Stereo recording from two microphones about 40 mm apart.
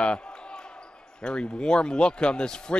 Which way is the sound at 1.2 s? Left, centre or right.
Left.